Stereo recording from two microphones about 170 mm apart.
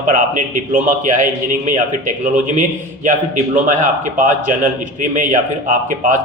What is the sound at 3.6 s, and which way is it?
A man's voice, 50° right (ahead or behind).